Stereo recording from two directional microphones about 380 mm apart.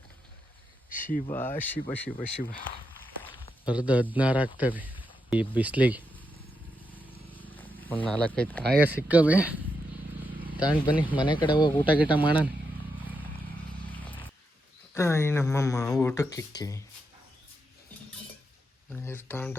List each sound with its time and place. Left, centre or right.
0.9 s a sound: left
1.3 s speech: centre
2.0 s speech: left
3.2 s a sound: centre
3.8 s speech: centre
6.9 s a sound: centre
8.7 s speech: centre
10.6 s speech: centre
11.9 s speech: centre
13.9 s a sound: centre
14.9 s speech: centre
19.0 s speech: centre